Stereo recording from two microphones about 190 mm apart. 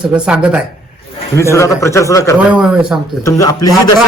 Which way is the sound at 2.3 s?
5° right (ahead or behind).